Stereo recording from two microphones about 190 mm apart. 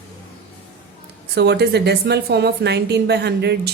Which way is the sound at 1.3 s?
60° right (ahead or behind).